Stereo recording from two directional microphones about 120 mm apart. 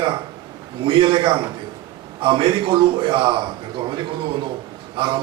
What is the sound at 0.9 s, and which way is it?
A man's voice, 45° right (ahead or behind).